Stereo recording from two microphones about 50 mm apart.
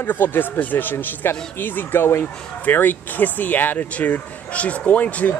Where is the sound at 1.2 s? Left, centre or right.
Left.